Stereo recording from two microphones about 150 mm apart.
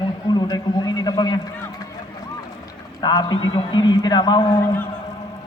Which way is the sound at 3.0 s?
30° left (ahead or behind).